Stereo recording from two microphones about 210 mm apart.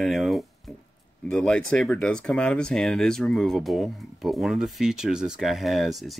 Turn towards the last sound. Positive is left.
turn(degrees=0)  # may be behind; listen again after turning